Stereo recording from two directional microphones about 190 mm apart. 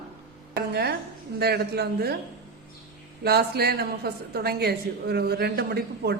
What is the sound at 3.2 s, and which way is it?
A woman's voice, 55° right (ahead or behind).